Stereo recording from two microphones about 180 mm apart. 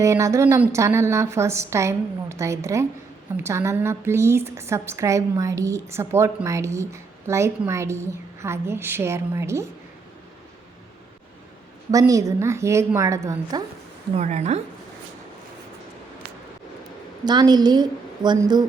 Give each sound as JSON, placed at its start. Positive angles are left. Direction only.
{"t": 0.0, "sound": "a woman's voice", "side_deg": -15}
{"t": 11.9, "sound": "a woman's voice", "side_deg": -20}
{"t": 14.2, "sound": "a woman's voice", "side_deg": -40}
{"t": 17.2, "sound": "a woman's voice", "side_deg": -25}